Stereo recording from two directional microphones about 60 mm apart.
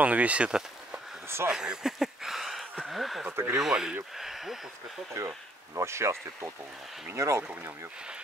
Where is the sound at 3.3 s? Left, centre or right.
Right.